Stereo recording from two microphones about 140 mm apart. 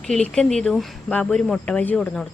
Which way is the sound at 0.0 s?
5° left (ahead or behind).